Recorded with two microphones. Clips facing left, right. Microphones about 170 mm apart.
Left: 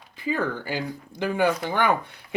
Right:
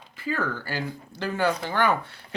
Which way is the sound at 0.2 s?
15° left (ahead or behind).